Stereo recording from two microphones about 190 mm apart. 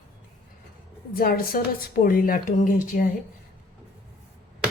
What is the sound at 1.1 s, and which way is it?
A woman's voice, 50° left (ahead or behind).